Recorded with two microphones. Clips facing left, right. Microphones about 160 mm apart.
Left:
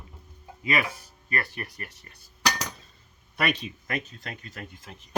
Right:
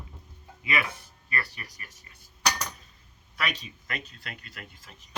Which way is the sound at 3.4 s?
55° left (ahead or behind).